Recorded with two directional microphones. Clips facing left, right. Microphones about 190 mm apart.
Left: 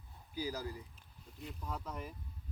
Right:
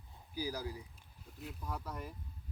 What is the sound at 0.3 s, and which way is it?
Speech, 10° right (ahead or behind).